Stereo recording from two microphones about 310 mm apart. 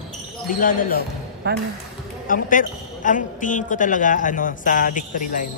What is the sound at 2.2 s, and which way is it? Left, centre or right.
A man's voice, left.